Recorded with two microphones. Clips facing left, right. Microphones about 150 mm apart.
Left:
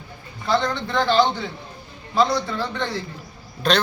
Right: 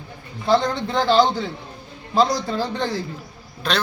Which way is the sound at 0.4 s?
35° right (ahead or behind).